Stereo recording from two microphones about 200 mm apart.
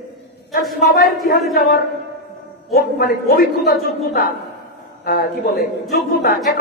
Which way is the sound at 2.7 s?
50° left (ahead or behind).